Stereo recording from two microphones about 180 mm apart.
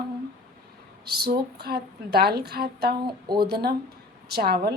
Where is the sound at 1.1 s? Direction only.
60° right (ahead or behind).